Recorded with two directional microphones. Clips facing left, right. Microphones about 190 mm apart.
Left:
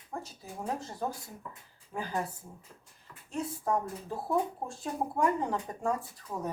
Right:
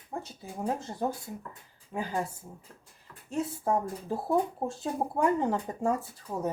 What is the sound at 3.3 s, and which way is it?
Speech, 25° right (ahead or behind).